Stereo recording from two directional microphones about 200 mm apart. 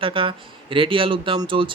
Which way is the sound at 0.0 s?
25° right (ahead or behind).